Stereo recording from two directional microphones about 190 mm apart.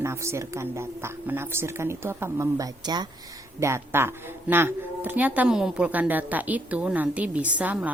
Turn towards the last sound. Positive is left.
turn(degrees=-10)  # may be behind; listen again after turning